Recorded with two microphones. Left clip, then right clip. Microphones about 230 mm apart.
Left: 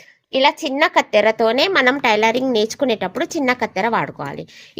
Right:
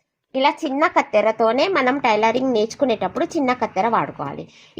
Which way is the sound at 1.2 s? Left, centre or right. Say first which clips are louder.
Left 2 dB; left.